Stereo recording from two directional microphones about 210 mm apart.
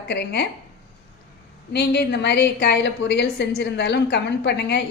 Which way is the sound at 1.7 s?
50° left (ahead or behind).